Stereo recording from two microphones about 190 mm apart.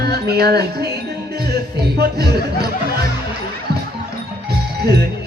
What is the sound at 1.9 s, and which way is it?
Speech, 55° right (ahead or behind).